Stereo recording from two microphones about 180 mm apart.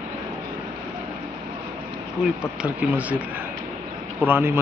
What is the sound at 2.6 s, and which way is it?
Speech, 10° right (ahead or behind).